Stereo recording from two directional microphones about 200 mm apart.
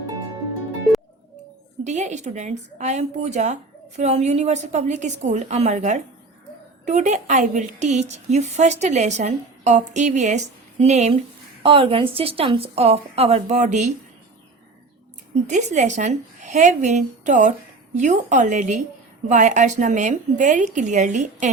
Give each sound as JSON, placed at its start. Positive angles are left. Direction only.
{"t": 1.8, "sound": "a woman's voice", "side_deg": -35}
{"t": 15.4, "sound": "a woman's voice", "side_deg": -35}